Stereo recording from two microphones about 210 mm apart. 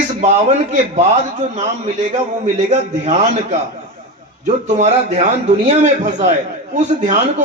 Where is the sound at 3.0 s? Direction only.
30° right (ahead or behind).